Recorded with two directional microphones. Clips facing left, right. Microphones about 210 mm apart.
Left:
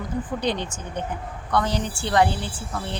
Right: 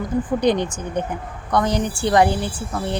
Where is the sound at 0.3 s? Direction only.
15° right (ahead or behind).